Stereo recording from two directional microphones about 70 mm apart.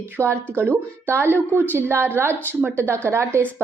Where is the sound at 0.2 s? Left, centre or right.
Right.